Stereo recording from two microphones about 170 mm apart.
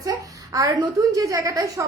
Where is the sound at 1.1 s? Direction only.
20° right (ahead or behind).